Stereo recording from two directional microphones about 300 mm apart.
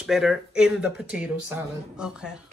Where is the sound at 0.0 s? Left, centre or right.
Centre.